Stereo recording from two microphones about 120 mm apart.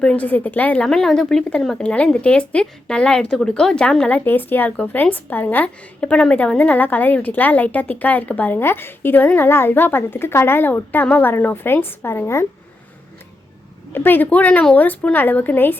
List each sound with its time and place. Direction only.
0.0 s a woman's voice: 10° left (ahead or behind)
13.9 s a woman's voice: 15° left (ahead or behind)